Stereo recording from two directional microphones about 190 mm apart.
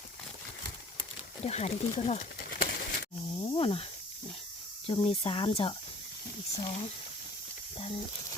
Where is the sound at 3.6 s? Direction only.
30° left (ahead or behind).